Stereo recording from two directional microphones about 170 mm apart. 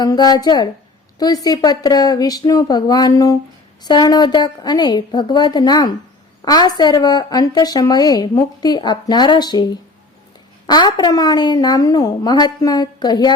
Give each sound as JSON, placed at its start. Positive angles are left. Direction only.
{"t": 0.0, "sound": "a woman's voice", "side_deg": 25}